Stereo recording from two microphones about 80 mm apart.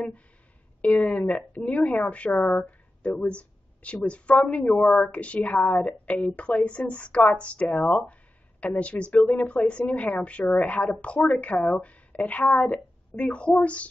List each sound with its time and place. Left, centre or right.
0.9 s speech: centre